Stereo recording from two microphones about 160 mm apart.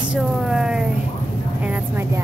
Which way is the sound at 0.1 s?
5° right (ahead or behind).